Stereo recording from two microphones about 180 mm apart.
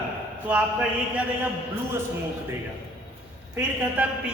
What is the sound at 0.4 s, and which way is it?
Speech, 10° right (ahead or behind).